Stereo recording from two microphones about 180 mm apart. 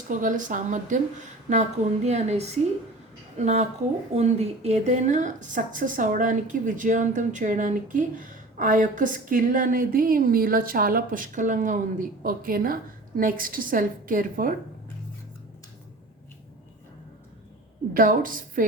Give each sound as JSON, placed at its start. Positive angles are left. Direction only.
{"t": 0.1, "sound": "a woman's voice", "side_deg": -45}
{"t": 17.9, "sound": "a woman's voice", "side_deg": -50}